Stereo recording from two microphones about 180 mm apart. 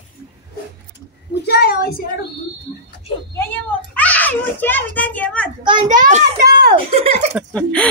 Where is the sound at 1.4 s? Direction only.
65° left (ahead or behind).